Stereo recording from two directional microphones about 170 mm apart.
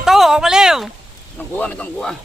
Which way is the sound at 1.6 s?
5° left (ahead or behind).